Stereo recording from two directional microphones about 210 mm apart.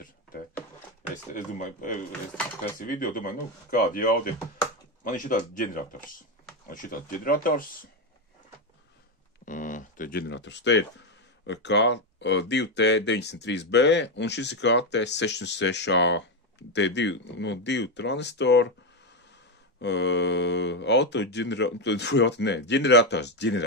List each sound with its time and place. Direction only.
1.1 s speech: 35° left (ahead or behind)
9.4 s a sound: 40° left (ahead or behind)
10.2 s speech: 55° left (ahead or behind)
19.8 s speech: 55° left (ahead or behind)